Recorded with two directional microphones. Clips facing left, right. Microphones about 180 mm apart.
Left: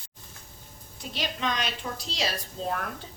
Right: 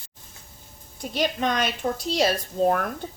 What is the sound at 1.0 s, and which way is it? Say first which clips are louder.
A woman's voice: right 7 dB; 50° right (ahead or behind).